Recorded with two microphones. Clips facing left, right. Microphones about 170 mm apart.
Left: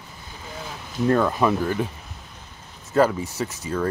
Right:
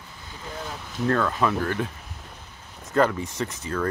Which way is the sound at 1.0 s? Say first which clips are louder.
Left 4 dB; 15° left (ahead or behind).